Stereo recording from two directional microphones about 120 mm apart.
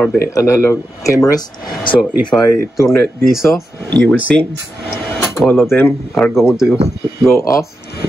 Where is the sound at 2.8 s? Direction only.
25° left (ahead or behind).